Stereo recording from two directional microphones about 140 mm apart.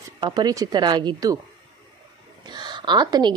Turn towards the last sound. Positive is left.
turn(degrees=-30)  # may be behind; listen again after turning